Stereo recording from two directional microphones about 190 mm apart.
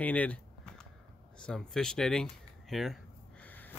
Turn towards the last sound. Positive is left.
turn(degrees=10)  # may be behind; listen again after turning